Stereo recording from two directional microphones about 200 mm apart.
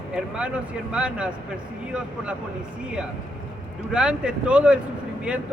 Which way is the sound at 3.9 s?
5° right (ahead or behind).